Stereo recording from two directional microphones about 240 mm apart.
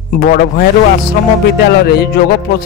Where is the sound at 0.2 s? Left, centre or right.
Left.